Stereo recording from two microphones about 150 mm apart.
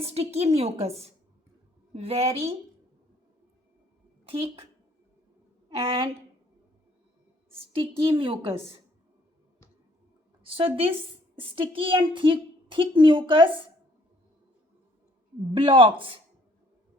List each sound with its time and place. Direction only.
0.0 s a woman's voice: 45° right (ahead or behind)
4.3 s a woman's voice: 40° right (ahead or behind)
5.6 s a woman's voice: 35° right (ahead or behind)
7.8 s a woman's voice: 35° right (ahead or behind)
10.4 s a woman's voice: 40° right (ahead or behind)
15.5 s a woman's voice: 35° right (ahead or behind)